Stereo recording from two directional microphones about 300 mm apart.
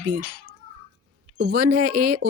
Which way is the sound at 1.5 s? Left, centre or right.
Right.